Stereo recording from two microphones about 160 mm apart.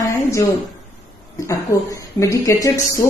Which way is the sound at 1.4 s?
20° left (ahead or behind).